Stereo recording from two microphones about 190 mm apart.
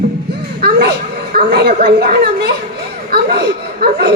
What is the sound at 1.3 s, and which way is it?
Speech, 50° right (ahead or behind).